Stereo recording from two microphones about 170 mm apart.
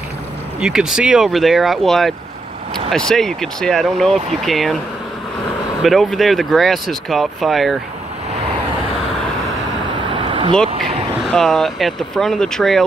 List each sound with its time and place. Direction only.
0.6 s speech: 5° right (ahead or behind)
5.8 s speech: centre (ahead or behind)
10.1 s vehicle: 30° right (ahead or behind)
11.1 s speech: centre (ahead or behind)